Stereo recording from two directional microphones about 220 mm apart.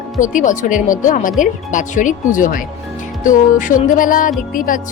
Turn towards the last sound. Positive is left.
turn(degrees=40)  # may be behind; listen again after turning